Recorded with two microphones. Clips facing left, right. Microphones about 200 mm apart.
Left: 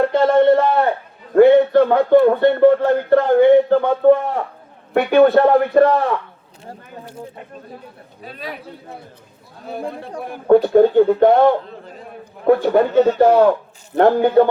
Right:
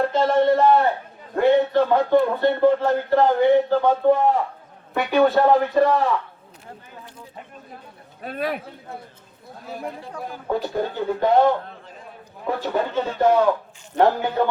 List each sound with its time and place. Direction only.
0.1 s a sound: 60° left (ahead or behind)
1.4 s speech: 60° left (ahead or behind)
8.2 s a man's voice: 55° right (ahead or behind)
10.2 s speech: 60° left (ahead or behind)